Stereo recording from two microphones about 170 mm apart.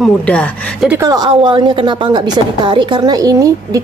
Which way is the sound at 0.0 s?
5° left (ahead or behind).